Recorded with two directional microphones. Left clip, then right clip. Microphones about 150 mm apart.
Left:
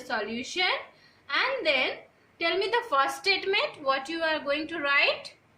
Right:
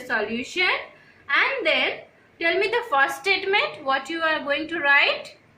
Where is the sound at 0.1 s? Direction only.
85° left; by 5.0 s 70° left (ahead or behind).